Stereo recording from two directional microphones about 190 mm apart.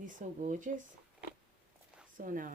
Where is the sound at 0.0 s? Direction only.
45° right (ahead or behind).